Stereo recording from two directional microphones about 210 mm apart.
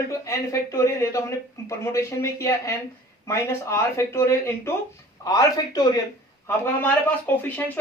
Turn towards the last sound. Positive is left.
turn(degrees=10)  # may be behind; listen again after turning